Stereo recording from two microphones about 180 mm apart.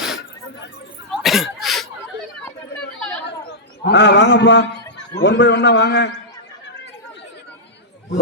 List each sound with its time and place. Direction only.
0.0 s a sound: centre (ahead or behind)
1.1 s cough: centre (ahead or behind)
3.0 s chatter: 5° left (ahead or behind)
3.8 s a man's voice: 70° left (ahead or behind)